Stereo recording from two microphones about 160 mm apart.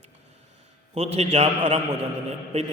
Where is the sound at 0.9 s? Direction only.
40° right (ahead or behind).